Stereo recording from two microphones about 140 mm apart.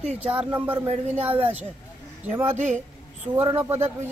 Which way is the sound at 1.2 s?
45° right (ahead or behind).